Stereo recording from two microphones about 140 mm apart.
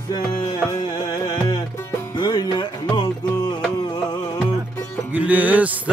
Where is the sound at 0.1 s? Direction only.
30° left (ahead or behind).